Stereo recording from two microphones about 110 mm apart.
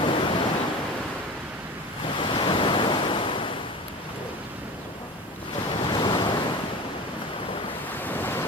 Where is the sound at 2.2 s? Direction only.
50° left (ahead or behind).